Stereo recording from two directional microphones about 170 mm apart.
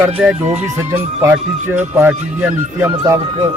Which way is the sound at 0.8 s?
15° right (ahead or behind).